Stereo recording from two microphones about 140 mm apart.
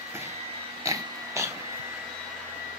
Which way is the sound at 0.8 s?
20° right (ahead or behind).